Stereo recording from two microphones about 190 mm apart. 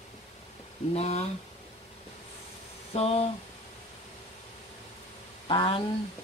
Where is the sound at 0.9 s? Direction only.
35° left (ahead or behind).